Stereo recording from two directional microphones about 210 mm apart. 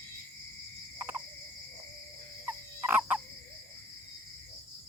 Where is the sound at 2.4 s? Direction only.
5° right (ahead or behind).